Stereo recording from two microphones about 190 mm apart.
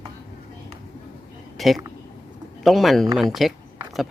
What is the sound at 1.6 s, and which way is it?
Speech, centre (ahead or behind).